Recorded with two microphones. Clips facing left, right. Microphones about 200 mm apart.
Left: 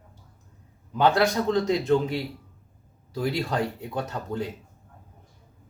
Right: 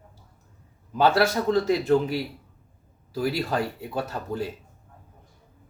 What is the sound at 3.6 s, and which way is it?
Speech, 20° left (ahead or behind).